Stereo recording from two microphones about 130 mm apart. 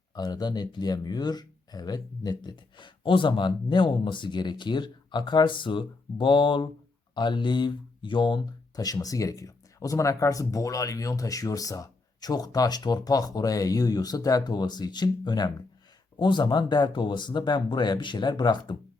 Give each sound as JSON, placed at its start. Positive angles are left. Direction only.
{"t": 0.1, "sound": "speech", "side_deg": 30}